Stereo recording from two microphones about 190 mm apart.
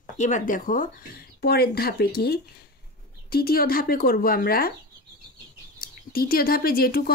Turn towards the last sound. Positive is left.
turn(degrees=50)  # may be behind; listen again after turning